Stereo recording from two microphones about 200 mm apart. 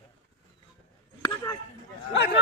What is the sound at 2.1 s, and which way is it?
Speech, 60° left (ahead or behind).